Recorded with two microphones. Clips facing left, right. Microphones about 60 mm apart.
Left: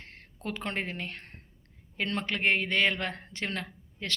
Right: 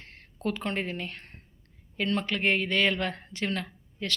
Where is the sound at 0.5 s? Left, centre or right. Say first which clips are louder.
Left 2 dB; left.